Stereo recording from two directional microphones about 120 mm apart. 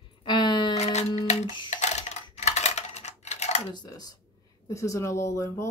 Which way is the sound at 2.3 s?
65° left (ahead or behind).